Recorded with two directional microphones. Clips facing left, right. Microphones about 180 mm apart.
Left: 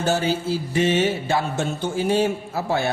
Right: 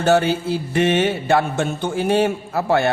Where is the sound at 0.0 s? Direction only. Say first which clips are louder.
Right 5 dB; 60° right (ahead or behind).